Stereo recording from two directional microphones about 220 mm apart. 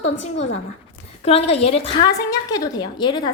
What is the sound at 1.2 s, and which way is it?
A woman's voice, 25° left (ahead or behind).